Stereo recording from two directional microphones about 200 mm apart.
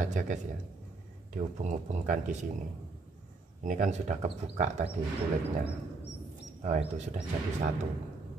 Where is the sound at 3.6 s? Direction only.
40° right (ahead or behind).